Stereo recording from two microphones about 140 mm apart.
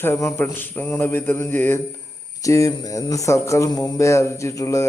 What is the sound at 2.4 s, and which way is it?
Mantra, 25° left (ahead or behind).